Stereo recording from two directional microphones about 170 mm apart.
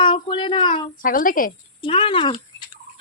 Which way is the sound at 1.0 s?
55° left (ahead or behind).